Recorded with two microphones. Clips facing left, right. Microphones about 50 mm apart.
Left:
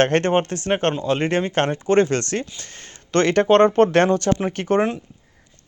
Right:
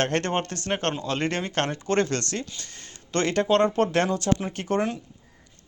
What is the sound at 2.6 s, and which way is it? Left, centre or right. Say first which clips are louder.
Speech: left 3 dB; left.